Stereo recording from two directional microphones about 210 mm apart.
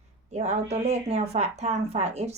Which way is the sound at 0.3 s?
30° right (ahead or behind).